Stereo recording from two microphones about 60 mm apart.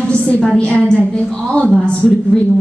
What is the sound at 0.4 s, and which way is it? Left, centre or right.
Speech, centre.